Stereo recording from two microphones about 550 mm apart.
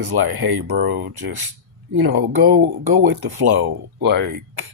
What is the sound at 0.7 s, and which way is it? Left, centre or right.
Speech, centre.